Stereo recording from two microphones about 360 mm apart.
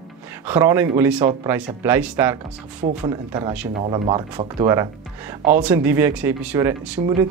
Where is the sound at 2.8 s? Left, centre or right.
Centre.